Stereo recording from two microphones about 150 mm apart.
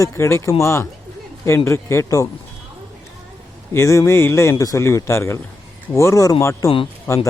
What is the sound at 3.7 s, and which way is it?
Speech, 20° left (ahead or behind).